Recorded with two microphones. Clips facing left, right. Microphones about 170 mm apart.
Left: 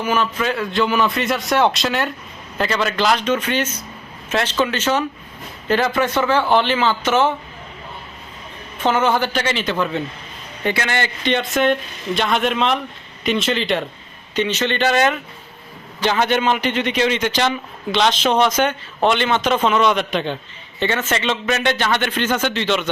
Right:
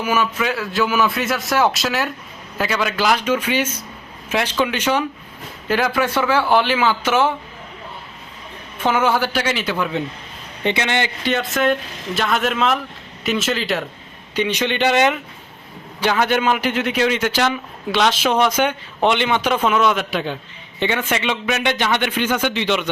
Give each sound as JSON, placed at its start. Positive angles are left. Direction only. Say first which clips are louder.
{"t": 0.0, "sound": "a man's voice", "louder": "even", "side_deg": -10}
{"t": 8.8, "sound": "a man's voice", "louder": "even", "side_deg": -10}